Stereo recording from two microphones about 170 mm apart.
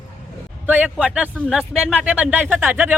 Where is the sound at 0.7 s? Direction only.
5° right (ahead or behind).